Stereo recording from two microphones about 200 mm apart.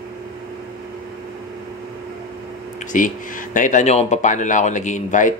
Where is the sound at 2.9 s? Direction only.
40° left (ahead or behind).